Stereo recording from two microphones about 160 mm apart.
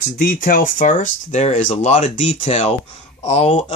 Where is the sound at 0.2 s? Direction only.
60° left (ahead or behind).